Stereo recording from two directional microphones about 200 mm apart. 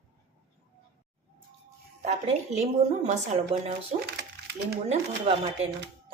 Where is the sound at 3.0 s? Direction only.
35° right (ahead or behind).